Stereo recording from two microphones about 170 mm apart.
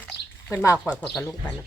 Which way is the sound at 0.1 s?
85° left.